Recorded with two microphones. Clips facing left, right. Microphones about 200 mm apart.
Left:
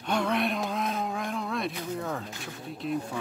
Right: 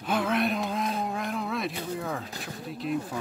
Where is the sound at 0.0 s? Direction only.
Centre (ahead or behind).